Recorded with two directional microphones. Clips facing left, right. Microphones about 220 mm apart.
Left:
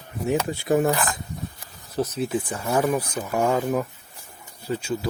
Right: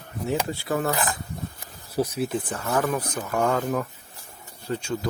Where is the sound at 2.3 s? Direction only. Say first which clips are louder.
Left 2 dB; 10° left (ahead or behind).